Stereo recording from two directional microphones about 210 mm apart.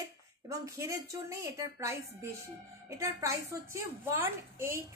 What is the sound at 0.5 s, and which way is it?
A child's voice, 15° right (ahead or behind).